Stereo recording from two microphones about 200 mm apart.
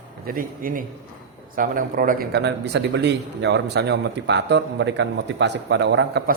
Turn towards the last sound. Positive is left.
turn(degrees=-60)  # may be behind; listen again after turning